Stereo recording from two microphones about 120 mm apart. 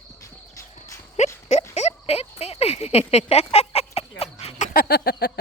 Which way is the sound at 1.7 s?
60° left (ahead or behind).